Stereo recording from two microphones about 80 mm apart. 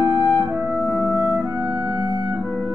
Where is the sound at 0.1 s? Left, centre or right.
Centre.